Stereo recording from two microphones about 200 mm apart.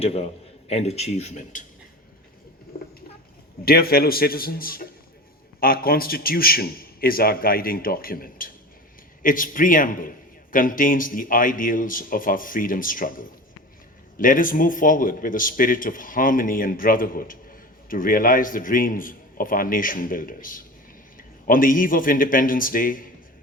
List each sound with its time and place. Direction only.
0.0 s a man's voice: 30° left (ahead or behind)
3.7 s a man's voice: 50° left (ahead or behind)